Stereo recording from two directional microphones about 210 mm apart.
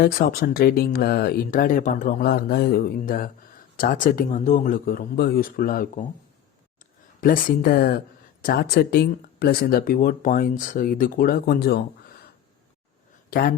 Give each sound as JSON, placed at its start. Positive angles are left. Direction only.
{"t": 0.0, "sound": "speech", "side_deg": 45}
{"t": 7.2, "sound": "speech", "side_deg": 40}
{"t": 13.3, "sound": "speech", "side_deg": 45}